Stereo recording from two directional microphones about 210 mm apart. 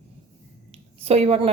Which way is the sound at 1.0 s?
30° right (ahead or behind).